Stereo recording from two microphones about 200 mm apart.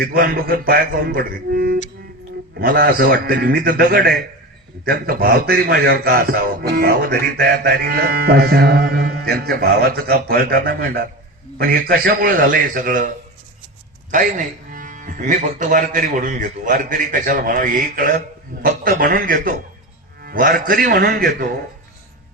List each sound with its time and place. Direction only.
0.0 s a man's voice: 50° right (ahead or behind)
14.1 s a man's voice: 40° right (ahead or behind)